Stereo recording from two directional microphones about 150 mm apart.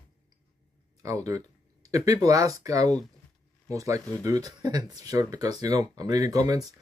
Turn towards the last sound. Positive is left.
turn(degrees=-20)  # may be behind; listen again after turning